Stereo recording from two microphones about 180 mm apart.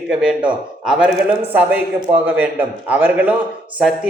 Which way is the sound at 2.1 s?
10° right (ahead or behind).